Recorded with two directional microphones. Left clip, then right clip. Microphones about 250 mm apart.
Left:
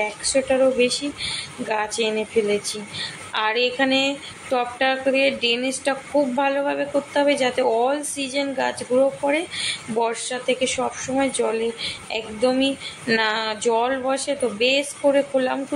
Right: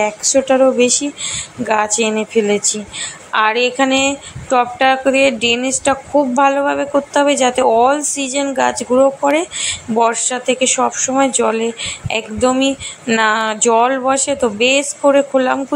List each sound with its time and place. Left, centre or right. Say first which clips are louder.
0.0 s a woman's voice: right 7 dB; centre